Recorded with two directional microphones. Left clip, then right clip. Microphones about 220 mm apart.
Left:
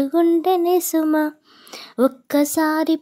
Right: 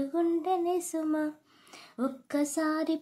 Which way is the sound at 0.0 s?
40° left (ahead or behind).